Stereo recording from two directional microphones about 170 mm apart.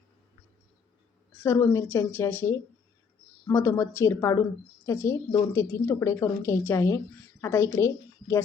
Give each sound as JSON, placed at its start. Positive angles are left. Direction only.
{"t": 1.4, "sound": "a woman's voice", "side_deg": 15}